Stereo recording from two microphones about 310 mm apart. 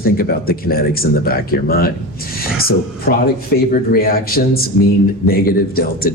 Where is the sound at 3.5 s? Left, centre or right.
Left.